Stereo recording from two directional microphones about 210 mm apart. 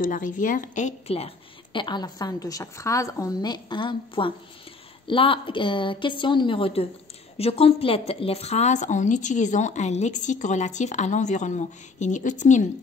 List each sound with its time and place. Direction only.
0.0 s a woman's voice: 40° left (ahead or behind)